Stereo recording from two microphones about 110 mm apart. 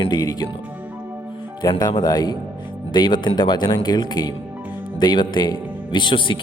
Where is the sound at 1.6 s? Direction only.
40° left (ahead or behind).